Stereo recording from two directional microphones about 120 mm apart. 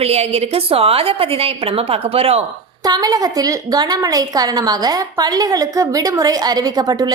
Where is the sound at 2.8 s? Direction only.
30° right (ahead or behind).